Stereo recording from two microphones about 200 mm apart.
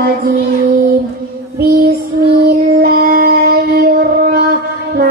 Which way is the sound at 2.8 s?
45° right (ahead or behind).